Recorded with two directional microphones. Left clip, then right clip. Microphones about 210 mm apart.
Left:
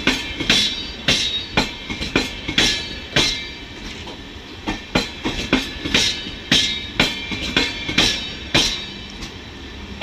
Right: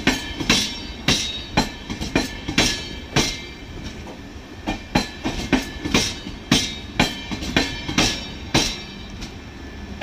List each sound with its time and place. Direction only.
0.0 s music: 60° right (ahead or behind)
5.5 s music: 60° right (ahead or behind)